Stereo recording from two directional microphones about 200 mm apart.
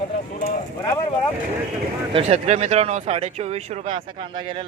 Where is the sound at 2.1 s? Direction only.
30° right (ahead or behind).